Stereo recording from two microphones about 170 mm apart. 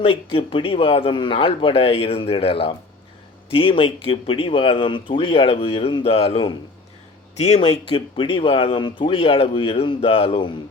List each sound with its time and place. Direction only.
0.0 s speech: 30° left (ahead or behind)